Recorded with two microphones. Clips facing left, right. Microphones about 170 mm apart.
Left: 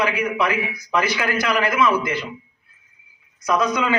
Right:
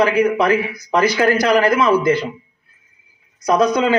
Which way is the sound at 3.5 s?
35° right (ahead or behind).